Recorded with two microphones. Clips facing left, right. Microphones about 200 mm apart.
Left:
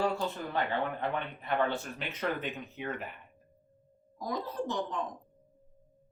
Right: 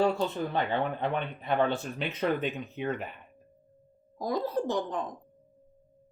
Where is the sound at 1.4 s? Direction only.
20° right (ahead or behind).